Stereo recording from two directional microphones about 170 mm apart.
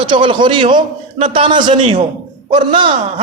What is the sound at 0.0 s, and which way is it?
A man's voice, 30° right (ahead or behind).